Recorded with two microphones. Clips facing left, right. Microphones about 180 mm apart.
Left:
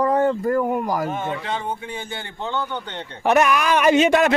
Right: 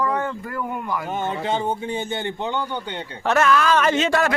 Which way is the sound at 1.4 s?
35° right (ahead or behind).